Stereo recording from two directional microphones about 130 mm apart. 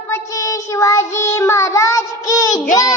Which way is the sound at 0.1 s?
25° left (ahead or behind).